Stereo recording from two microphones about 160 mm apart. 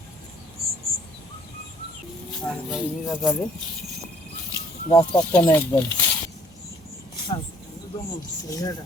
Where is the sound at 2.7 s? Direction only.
Centre (ahead or behind).